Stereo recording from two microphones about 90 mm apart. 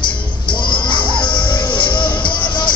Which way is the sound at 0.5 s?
60° left (ahead or behind).